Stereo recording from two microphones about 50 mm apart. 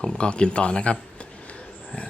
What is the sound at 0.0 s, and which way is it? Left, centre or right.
Speech, centre.